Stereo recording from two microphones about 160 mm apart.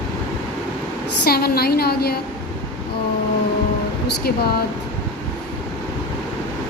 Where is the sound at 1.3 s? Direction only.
75° left (ahead or behind).